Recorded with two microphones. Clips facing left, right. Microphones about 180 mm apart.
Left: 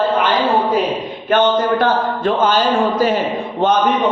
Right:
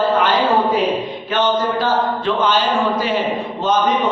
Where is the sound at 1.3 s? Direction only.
55° left (ahead or behind).